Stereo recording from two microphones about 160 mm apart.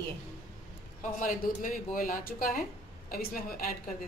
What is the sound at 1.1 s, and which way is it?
Speech, 55° left (ahead or behind).